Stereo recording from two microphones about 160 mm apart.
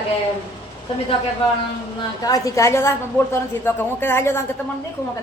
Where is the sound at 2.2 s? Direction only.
20° left (ahead or behind).